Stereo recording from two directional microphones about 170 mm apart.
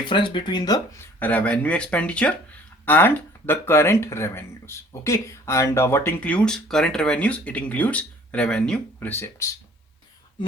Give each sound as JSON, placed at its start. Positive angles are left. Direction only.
{"t": 0.0, "sound": "speech", "side_deg": 30}
{"t": 1.2, "sound": "speech", "side_deg": 10}